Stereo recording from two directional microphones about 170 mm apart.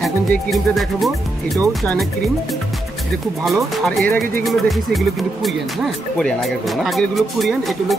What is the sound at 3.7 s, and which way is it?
Speech, centre (ahead or behind).